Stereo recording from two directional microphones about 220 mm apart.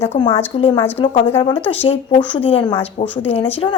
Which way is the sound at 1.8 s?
25° left (ahead or behind).